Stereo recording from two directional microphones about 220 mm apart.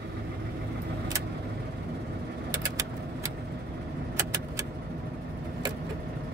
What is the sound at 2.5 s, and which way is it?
Vehicle, 15° right (ahead or behind).